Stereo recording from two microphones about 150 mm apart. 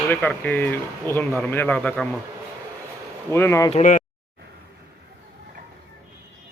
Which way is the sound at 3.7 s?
55° left (ahead or behind).